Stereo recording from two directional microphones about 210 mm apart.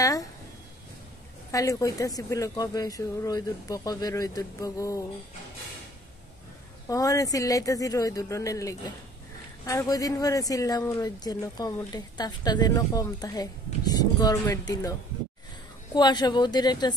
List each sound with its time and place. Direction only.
0.0 s speech: 15° left (ahead or behind)
1.5 s speech: 15° left (ahead or behind)
6.9 s speech: 15° left (ahead or behind)